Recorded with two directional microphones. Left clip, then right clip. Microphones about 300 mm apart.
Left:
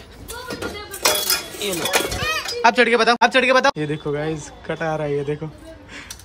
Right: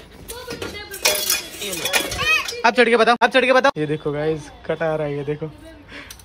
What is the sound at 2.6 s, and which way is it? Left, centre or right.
Speech, centre.